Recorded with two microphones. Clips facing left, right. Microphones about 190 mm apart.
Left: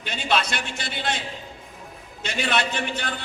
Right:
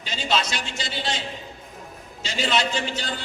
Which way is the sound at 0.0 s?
55° left (ahead or behind).